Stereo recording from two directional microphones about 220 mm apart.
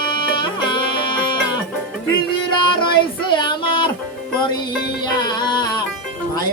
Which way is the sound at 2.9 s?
20° left (ahead or behind).